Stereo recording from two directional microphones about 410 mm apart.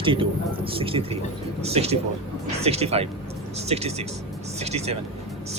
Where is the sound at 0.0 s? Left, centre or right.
Centre.